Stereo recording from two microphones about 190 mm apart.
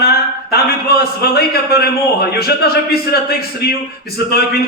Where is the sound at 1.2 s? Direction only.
55° left (ahead or behind).